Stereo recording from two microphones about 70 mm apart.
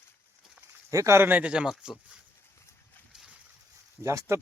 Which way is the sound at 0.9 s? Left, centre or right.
Right.